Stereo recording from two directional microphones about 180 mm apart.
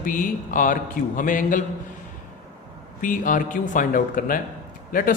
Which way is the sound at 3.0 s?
50° left (ahead or behind).